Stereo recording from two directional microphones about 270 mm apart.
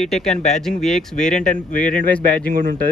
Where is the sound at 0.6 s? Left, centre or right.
Centre.